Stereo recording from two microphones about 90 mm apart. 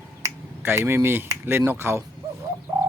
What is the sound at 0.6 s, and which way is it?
Speech, 25° right (ahead or behind).